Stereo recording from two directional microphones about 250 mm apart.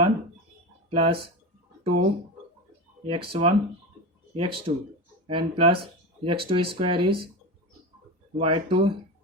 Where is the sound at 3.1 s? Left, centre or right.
Right.